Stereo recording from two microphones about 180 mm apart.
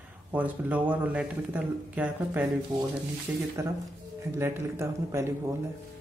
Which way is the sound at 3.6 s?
15° right (ahead or behind).